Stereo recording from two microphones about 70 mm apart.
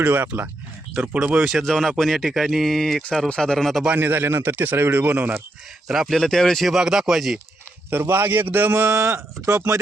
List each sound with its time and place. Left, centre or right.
0.0 s speech: right
1.5 s speech: centre
3.9 s speech: right
5.9 s speech: centre
6.7 s speech: centre
7.9 s speech: right
8.9 s speech: right